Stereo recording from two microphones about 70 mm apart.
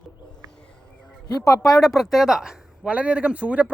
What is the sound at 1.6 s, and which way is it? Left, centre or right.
Speech, centre.